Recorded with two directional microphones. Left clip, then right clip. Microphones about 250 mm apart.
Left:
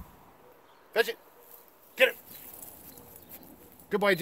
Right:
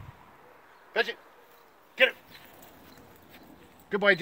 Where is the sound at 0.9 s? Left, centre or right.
Left.